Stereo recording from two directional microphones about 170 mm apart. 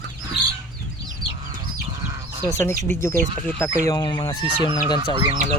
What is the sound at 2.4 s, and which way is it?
Speech, 15° left (ahead or behind).